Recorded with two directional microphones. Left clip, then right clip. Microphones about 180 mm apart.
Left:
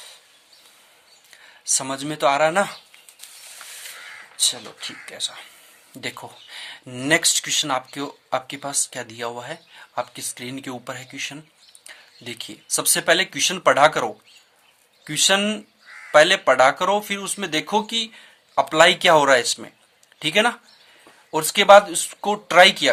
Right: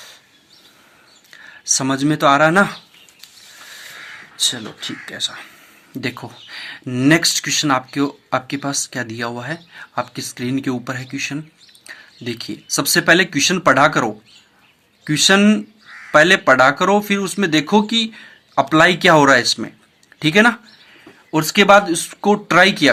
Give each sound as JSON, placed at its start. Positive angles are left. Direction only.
{"t": 1.3, "sound": "speech", "side_deg": 15}
{"t": 4.4, "sound": "a sound", "side_deg": 15}
{"t": 5.0, "sound": "speech", "side_deg": 15}
{"t": 21.3, "sound": "speech", "side_deg": 30}